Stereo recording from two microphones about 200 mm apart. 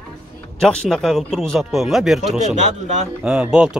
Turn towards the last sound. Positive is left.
turn(degrees=-5)  # may be behind; listen again after turning